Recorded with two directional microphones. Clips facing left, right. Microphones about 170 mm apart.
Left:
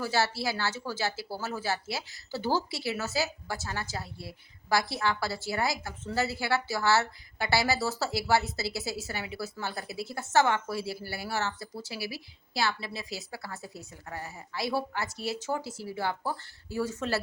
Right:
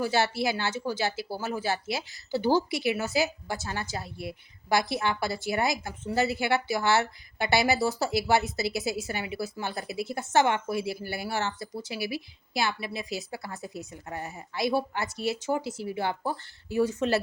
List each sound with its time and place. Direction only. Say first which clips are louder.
0.0 s speech: right 3 dB; 20° right (ahead or behind)